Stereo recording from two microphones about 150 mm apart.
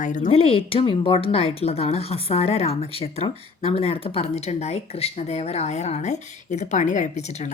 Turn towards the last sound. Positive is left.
turn(degrees=55)  # may be behind; listen again after turning